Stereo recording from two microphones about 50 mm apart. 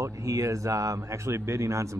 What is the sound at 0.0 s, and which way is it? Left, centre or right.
A man's voice, right.